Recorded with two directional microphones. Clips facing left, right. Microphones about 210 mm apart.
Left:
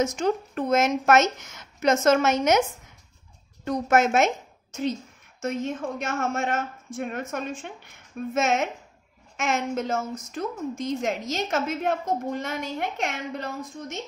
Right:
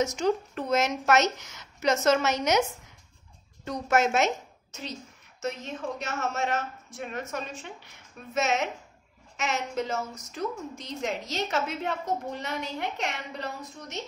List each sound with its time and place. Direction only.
0.0 s a woman's voice: 50° left (ahead or behind)
3.6 s a woman's voice: 50° left (ahead or behind)